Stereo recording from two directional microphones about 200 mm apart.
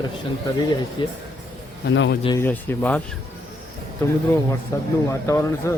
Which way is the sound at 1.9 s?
65° left (ahead or behind).